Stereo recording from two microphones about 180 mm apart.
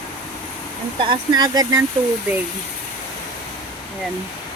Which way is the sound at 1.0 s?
25° right (ahead or behind).